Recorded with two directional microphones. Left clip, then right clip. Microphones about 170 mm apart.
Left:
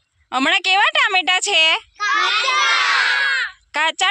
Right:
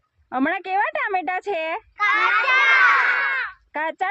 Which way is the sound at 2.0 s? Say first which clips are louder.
Right 2 dB; 20° left (ahead or behind).